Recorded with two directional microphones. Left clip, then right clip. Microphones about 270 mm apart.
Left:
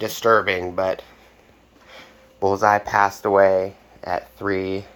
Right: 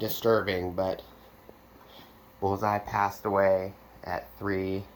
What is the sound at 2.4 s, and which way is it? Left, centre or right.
Speech, centre.